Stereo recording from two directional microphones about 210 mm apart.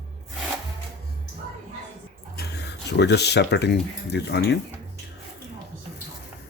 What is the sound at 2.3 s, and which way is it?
Speech, 50° left (ahead or behind).